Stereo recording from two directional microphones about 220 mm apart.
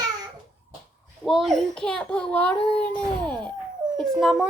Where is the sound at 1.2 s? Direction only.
Centre (ahead or behind).